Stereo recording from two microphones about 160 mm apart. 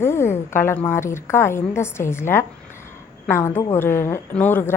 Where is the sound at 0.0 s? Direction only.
15° left (ahead or behind).